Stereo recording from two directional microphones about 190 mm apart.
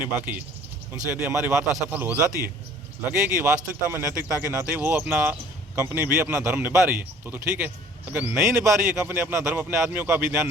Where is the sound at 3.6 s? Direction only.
10° right (ahead or behind).